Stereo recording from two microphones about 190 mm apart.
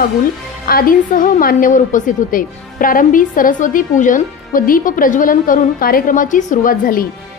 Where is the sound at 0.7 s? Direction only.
50° left (ahead or behind).